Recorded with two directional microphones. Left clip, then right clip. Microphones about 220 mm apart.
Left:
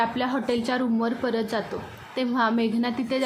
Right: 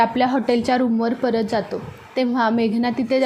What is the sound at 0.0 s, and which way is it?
A woman's voice, 20° right (ahead or behind).